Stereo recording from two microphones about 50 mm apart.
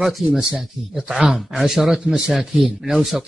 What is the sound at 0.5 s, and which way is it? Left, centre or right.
Speech, centre.